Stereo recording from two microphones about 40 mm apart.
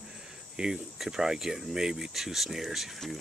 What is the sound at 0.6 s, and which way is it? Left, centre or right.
Speech, right.